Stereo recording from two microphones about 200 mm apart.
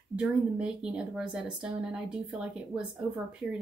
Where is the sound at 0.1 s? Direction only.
5° right (ahead or behind).